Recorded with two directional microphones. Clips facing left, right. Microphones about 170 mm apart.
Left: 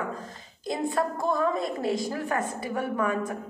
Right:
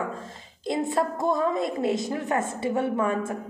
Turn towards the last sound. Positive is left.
turn(degrees=-25)  # may be behind; listen again after turning